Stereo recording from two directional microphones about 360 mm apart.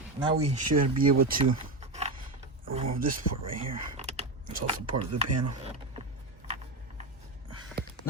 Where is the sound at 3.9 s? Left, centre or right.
Centre.